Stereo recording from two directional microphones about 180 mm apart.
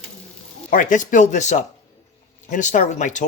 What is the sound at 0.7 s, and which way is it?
Speech, 45° left (ahead or behind).